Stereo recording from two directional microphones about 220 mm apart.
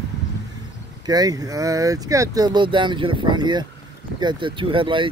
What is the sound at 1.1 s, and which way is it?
Speech, 15° right (ahead or behind).